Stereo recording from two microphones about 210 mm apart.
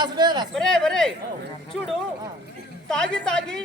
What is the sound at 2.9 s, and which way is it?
Speech, 5° left (ahead or behind).